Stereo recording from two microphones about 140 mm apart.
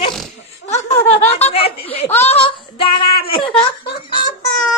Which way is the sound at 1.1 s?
50° left (ahead or behind).